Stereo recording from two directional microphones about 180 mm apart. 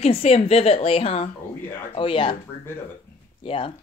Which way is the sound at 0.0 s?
35° left (ahead or behind).